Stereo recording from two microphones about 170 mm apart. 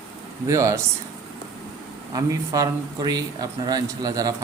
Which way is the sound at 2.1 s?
20° right (ahead or behind).